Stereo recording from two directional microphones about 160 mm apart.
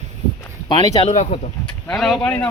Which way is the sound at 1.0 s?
45° left (ahead or behind).